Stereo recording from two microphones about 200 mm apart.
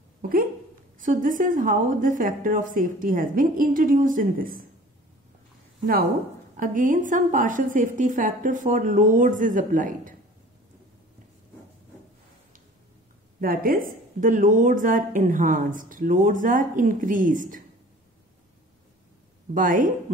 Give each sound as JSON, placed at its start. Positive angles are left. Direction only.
{"t": 0.9, "sound": "a woman's voice", "side_deg": -40}
{"t": 6.5, "sound": "a woman's voice", "side_deg": -40}
{"t": 13.4, "sound": "a woman's voice", "side_deg": -45}
{"t": 19.5, "sound": "a woman's voice", "side_deg": -40}